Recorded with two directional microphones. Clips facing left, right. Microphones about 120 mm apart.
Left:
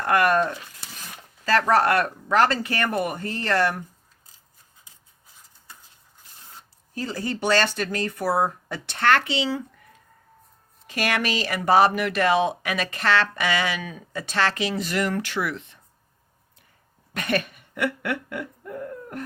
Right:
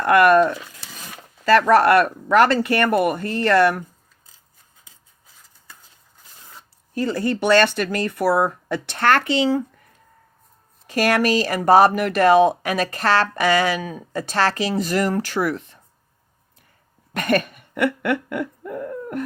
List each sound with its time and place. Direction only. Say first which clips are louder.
0.0 s speech: right 6 dB; 65° right (ahead or behind)
6.9 s speech: right 7 dB; 65° right (ahead or behind)
9.0 s speech: right 3 dB; 45° right (ahead or behind)
10.8 s speech: right 7 dB; 40° right (ahead or behind)
17.2 s a sound: right 5 dB; 50° right (ahead or behind)